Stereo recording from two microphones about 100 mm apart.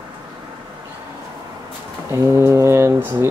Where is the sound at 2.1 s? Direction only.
30° right (ahead or behind).